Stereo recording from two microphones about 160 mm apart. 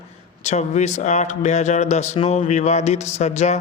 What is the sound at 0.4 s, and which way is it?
A man's voice, 45° left (ahead or behind).